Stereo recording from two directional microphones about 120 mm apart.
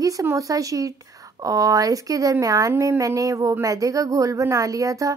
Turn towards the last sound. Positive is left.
turn(degrees=-30)  # may be behind; listen again after turning